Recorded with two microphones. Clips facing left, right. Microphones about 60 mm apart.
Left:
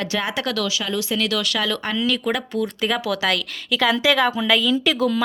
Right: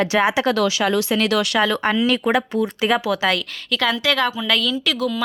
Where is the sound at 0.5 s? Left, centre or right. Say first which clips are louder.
Right 6 dB; right; by 3.4 s centre.